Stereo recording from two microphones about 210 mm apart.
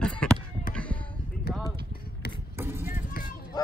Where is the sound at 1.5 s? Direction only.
45° left (ahead or behind).